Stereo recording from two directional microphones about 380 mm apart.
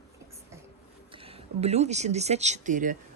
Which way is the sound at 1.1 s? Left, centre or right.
Centre.